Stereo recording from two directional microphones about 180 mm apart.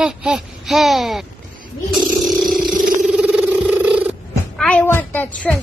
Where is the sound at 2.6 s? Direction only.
55° right (ahead or behind).